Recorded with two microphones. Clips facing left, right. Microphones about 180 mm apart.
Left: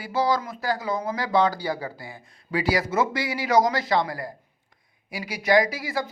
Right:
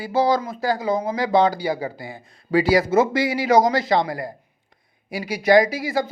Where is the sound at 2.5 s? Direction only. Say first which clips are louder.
Right 7 dB; 30° right (ahead or behind).